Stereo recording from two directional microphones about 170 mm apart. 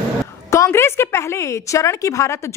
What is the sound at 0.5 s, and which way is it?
A woman's voice, 15° left (ahead or behind).